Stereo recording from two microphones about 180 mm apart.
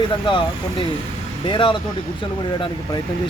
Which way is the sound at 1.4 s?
25° left (ahead or behind).